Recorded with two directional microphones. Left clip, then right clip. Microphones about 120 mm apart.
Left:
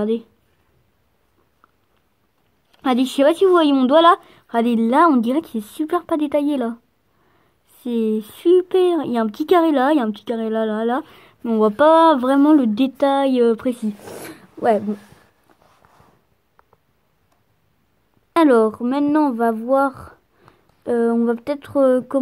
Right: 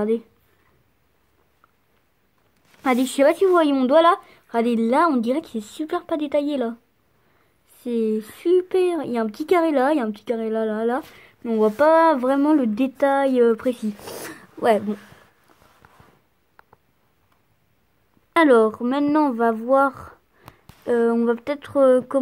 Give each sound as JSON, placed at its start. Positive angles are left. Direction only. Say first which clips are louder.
{"t": 0.0, "sound": "speech", "louder": "left 1 dB", "side_deg": 30}
{"t": 2.8, "sound": "speech", "louder": "left 1 dB", "side_deg": 30}
{"t": 14.3, "sound": "a sound", "louder": "left 1 dB", "side_deg": 15}
{"t": 18.3, "sound": "speech", "louder": "left 1 dB", "side_deg": 35}